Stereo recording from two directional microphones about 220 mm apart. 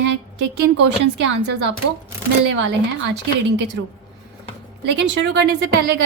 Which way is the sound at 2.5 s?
55° right (ahead or behind).